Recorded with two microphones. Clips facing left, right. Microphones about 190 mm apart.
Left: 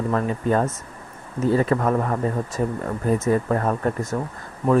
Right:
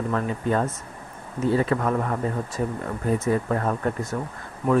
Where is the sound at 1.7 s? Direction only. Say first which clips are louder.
Left 3 dB; 40° left (ahead or behind).